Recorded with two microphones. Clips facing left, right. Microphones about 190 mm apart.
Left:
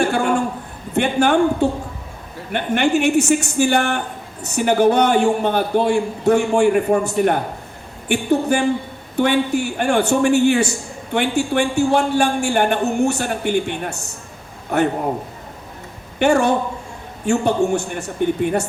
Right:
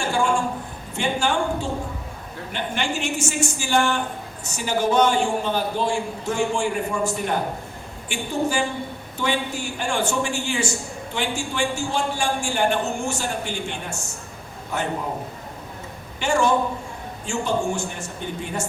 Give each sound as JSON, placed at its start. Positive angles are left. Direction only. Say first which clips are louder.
{"t": 0.0, "sound": "a sound", "louder": "left 4 dB", "side_deg": 60}
{"t": 1.6, "sound": "a man's voice", "louder": "left 8 dB", "side_deg": 60}
{"t": 16.1, "sound": "a man's voice", "louder": "left 5 dB", "side_deg": 60}